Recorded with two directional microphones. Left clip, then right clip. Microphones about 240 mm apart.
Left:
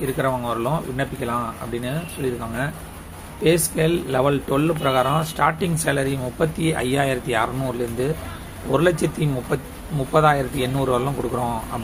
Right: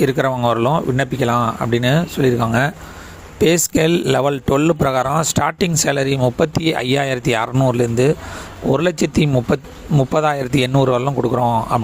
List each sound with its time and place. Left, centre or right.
0.0 s speech: right